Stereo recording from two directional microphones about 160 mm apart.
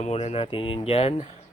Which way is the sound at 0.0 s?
40° left (ahead or behind).